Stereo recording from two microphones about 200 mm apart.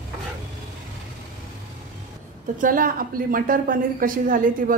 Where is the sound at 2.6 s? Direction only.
45° right (ahead or behind).